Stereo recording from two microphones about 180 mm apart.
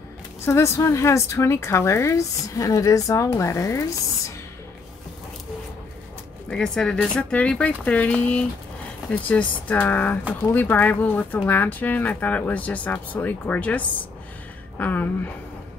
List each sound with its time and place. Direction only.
0.5 s speech: 15° left (ahead or behind)
6.5 s speech: 5° left (ahead or behind)